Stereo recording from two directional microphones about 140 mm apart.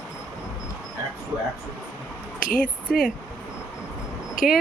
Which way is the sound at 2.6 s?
5° left (ahead or behind).